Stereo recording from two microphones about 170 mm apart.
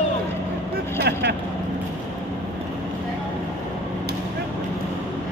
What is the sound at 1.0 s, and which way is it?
Vehicle, 70° right (ahead or behind).